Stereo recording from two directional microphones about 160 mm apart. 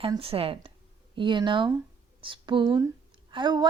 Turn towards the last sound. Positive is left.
turn(degrees=-30)  # may be behind; listen again after turning